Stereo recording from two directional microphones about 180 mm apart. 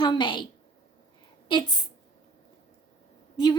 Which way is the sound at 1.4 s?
25° left (ahead or behind).